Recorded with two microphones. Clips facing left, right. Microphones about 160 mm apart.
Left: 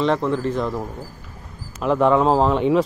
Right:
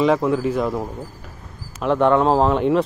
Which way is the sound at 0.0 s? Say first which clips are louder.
Right 2 dB; 10° right (ahead or behind).